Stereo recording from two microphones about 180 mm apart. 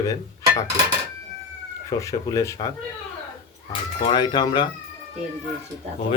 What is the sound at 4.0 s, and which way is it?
Speech, 30° left (ahead or behind).